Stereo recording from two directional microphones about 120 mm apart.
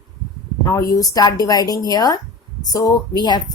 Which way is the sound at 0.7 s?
30° left (ahead or behind).